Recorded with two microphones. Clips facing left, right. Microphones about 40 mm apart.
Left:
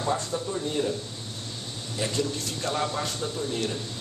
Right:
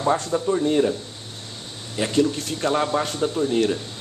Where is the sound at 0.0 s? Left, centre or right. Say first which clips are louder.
Right 7 dB; right.